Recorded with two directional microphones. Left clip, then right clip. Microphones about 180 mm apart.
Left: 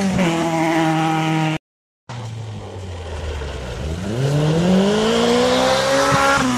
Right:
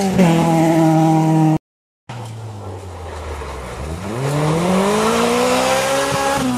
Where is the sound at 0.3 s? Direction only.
60° right (ahead or behind).